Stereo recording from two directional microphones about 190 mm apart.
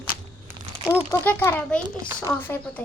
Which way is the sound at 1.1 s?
10° left (ahead or behind).